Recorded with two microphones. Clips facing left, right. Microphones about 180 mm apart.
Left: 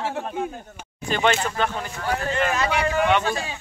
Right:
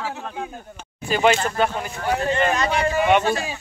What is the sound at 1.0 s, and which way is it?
Speech, 10° right (ahead or behind).